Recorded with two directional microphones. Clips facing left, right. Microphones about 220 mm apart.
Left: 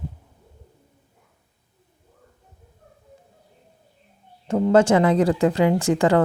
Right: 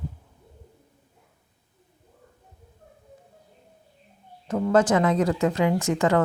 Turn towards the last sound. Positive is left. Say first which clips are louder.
# left 3 dB
turn(degrees=30)  # may be behind; listen again after turning